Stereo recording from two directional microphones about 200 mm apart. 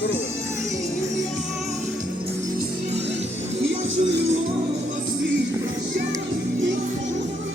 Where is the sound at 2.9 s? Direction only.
30° right (ahead or behind).